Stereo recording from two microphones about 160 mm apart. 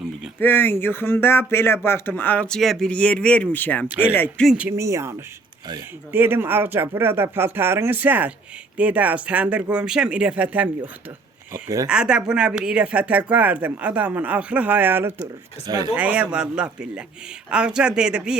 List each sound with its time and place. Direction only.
0.3 s speech: 10° left (ahead or behind)
4.4 s speech: 10° right (ahead or behind)
11.5 s speech: 20° right (ahead or behind)
11.9 s speech: 5° right (ahead or behind)
15.2 s speech: 25° right (ahead or behind)
16.0 s speech: 10° right (ahead or behind)